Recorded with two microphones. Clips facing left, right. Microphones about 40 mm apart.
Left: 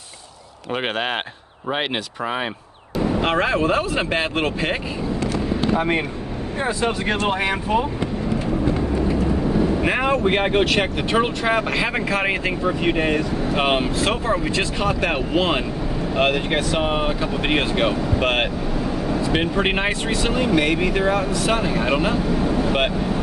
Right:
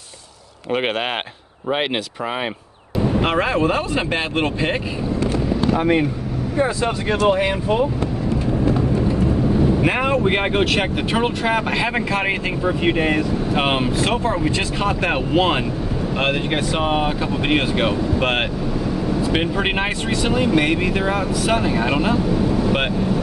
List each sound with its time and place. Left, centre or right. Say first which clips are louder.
0.7 s speech: right 2 dB; centre
5.8 s speech: right 6 dB; centre
6.8 s speech: right 1 dB; left
7.2 s speech: right 4 dB; left
9.8 s speech: right 1 dB; centre